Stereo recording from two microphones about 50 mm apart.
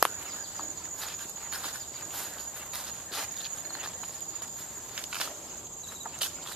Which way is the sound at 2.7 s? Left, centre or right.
Centre.